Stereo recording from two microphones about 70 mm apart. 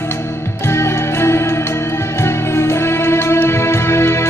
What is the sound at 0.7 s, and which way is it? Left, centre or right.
Music, left.